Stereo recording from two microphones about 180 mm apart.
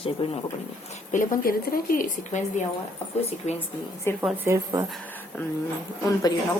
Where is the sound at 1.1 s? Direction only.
45° left (ahead or behind).